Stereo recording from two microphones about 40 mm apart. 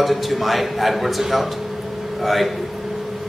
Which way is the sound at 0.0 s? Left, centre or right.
Centre.